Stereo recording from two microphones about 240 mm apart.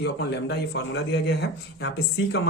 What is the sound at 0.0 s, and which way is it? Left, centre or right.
A man's voice, left.